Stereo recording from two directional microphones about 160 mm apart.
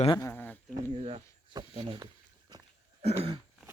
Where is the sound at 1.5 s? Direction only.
25° right (ahead or behind).